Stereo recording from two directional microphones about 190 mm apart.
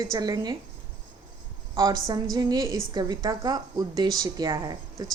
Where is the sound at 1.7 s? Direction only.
20° right (ahead or behind).